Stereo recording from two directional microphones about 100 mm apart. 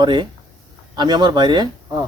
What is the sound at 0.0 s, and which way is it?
Speech, 50° right (ahead or behind).